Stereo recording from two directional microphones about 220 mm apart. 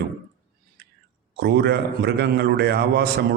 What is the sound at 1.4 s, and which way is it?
A man's voice, 50° right (ahead or behind).